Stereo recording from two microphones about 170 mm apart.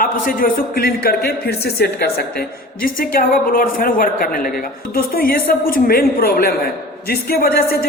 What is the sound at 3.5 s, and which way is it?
A man's voice, 55° left (ahead or behind).